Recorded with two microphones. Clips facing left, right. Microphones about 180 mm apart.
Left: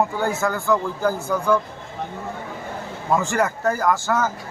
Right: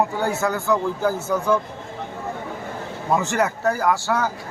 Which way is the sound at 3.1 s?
20° right (ahead or behind).